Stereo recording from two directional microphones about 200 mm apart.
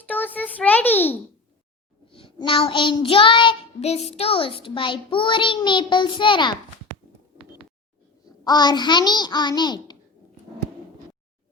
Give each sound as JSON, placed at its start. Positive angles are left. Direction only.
{"t": 0.0, "sound": "a child's voice", "side_deg": 10}
{"t": 2.0, "sound": "child singing", "side_deg": 25}
{"t": 8.4, "sound": "child singing", "side_deg": 20}